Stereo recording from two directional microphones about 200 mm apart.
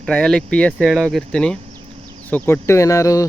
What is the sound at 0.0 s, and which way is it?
Speech, 5° left (ahead or behind).